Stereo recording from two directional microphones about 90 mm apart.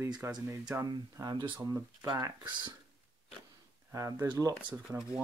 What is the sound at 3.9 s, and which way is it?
Speech, 35° right (ahead or behind).